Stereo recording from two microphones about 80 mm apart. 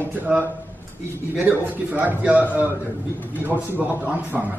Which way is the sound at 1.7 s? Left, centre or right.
Centre.